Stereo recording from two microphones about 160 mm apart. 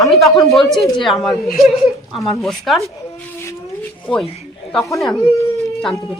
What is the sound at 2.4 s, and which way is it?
Speech, centre (ahead or behind).